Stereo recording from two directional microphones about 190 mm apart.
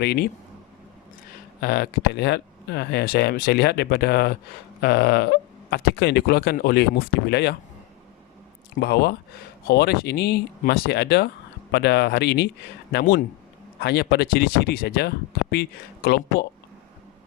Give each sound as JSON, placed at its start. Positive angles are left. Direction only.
{"t": 0.0, "sound": "speech", "side_deg": 55}
{"t": 1.6, "sound": "speech", "side_deg": 55}
{"t": 8.8, "sound": "speech", "side_deg": 60}